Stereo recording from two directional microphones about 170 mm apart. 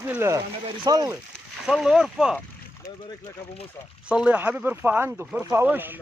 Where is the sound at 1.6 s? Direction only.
Centre (ahead or behind).